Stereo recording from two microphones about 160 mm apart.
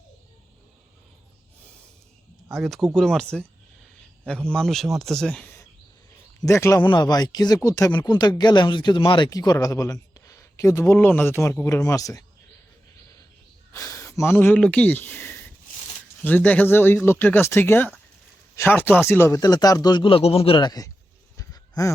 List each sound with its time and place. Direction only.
2.5 s speech: centre (ahead or behind)
4.5 s speech: 5° left (ahead or behind); by 12.2 s 20° left (ahead or behind)
13.7 s speech: 20° left (ahead or behind)
19.4 s speech: 25° left (ahead or behind)
21.3 s a sound: 20° left (ahead or behind)